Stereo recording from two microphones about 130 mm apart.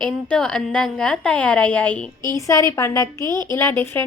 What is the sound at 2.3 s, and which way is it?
A woman's voice, 25° left (ahead or behind).